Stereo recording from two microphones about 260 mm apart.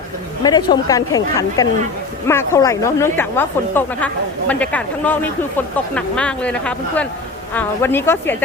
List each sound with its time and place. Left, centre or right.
0.4 s a woman's voice: centre